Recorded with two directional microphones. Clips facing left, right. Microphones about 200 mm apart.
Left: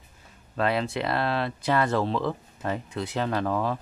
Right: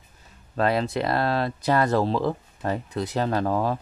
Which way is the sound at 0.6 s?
40° right (ahead or behind).